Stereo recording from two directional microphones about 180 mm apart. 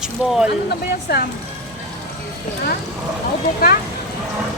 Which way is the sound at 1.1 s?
60° left (ahead or behind).